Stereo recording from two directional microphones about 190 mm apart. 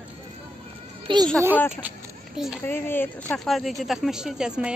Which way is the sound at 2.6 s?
10° left (ahead or behind).